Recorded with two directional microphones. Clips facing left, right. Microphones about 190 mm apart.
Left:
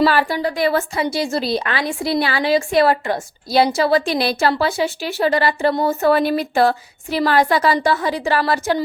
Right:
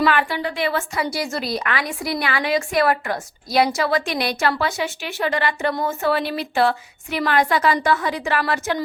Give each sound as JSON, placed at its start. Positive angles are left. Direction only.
{"t": 0.0, "sound": "a woman's voice", "side_deg": 35}
{"t": 0.9, "sound": "a woman's voice", "side_deg": 25}